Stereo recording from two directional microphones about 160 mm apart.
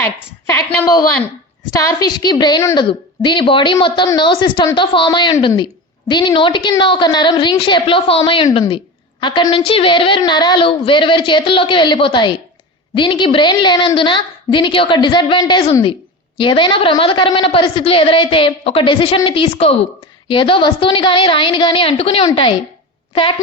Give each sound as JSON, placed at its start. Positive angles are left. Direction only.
{"t": 0.0, "sound": "a woman's voice", "side_deg": 15}